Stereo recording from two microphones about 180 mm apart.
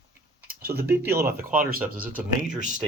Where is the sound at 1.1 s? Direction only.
60° right (ahead or behind).